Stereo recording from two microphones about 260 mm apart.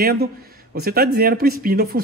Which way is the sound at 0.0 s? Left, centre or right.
Right.